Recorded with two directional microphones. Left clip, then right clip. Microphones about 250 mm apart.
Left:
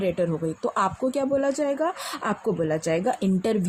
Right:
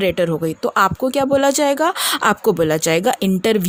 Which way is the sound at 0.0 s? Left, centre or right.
Right.